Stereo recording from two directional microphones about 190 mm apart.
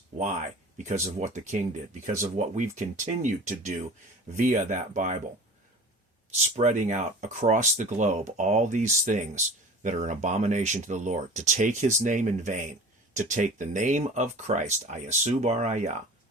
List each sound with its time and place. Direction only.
0.8 s speech: 40° right (ahead or behind)
6.3 s speech: 40° right (ahead or behind)